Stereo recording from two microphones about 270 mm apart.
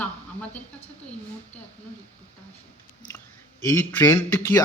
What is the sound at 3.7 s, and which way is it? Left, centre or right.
Speech, centre.